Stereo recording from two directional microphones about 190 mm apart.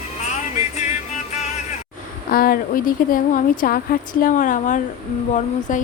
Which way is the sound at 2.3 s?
50° left (ahead or behind).